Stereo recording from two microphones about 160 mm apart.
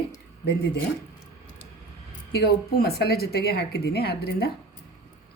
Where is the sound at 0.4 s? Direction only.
90° left.